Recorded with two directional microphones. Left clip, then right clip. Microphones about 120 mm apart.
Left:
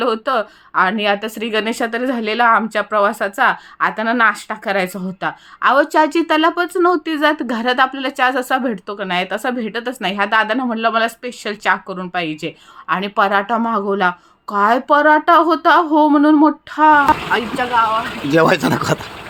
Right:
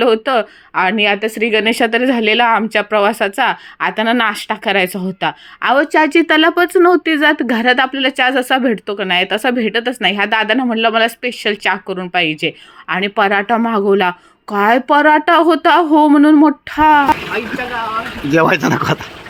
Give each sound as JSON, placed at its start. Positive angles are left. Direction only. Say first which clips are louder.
{"t": 0.0, "sound": "a woman's voice", "louder": "right 4 dB", "side_deg": -20}
{"t": 18.3, "sound": "speech", "louder": "right 1 dB", "side_deg": -10}